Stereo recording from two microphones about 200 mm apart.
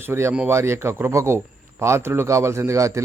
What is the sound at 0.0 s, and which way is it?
A man's voice, 10° right (ahead or behind).